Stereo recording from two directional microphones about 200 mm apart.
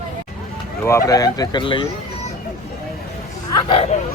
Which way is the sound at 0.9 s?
15° left (ahead or behind).